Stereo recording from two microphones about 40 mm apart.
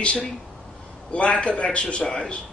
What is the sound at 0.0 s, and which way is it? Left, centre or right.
A man's voice, left.